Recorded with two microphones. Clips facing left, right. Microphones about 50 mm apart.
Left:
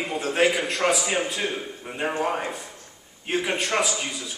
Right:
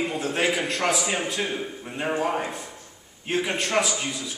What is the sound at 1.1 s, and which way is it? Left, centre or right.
Speech, centre.